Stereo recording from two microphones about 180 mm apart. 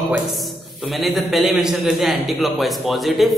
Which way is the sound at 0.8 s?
Centre (ahead or behind).